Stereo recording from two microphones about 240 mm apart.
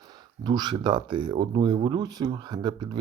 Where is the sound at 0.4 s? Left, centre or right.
Centre.